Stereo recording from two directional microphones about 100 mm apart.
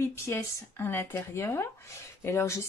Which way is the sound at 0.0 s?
25° left (ahead or behind).